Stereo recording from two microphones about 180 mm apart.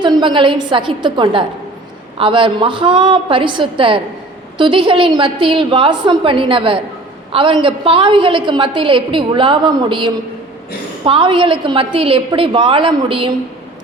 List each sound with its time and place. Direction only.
0.0 s a woman's voice: 25° right (ahead or behind)